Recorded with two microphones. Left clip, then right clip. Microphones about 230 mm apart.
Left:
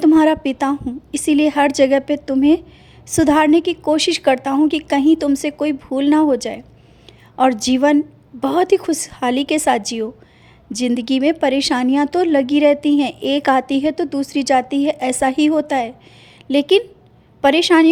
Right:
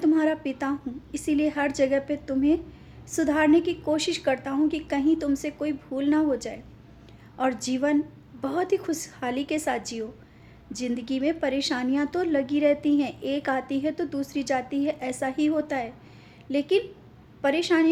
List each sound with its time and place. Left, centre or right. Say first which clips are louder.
0.0 s speech: left 10 dB; left